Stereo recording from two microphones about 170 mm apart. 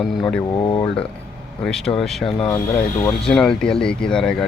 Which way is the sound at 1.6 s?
Centre (ahead or behind).